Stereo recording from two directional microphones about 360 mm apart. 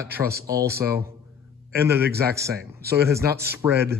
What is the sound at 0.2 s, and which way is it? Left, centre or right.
Speech, right.